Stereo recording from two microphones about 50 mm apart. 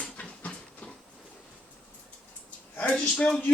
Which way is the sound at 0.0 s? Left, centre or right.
Left.